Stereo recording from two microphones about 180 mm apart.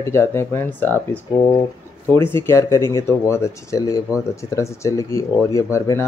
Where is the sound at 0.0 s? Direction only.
15° left (ahead or behind).